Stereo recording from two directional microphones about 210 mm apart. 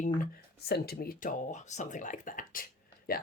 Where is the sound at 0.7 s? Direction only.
45° left (ahead or behind).